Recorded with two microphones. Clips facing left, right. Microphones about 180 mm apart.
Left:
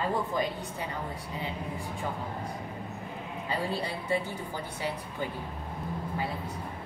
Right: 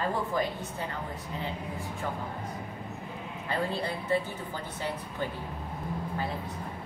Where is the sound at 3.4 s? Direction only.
15° left (ahead or behind).